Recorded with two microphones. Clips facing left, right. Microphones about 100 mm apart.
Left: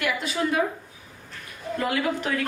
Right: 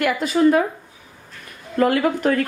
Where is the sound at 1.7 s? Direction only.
50° right (ahead or behind).